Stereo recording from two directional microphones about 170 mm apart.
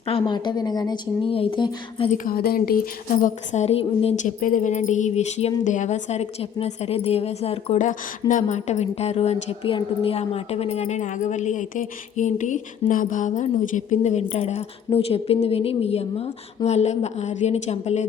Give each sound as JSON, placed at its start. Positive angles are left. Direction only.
{"t": 0.1, "sound": "a woman's voice", "side_deg": 30}
{"t": 2.0, "sound": "a woman's voice", "side_deg": 55}